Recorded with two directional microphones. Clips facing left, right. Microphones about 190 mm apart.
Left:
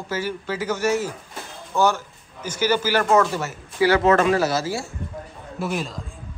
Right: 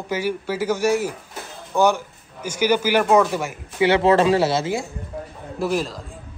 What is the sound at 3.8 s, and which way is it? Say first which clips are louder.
Speech: right 1 dB; 30° right (ahead or behind).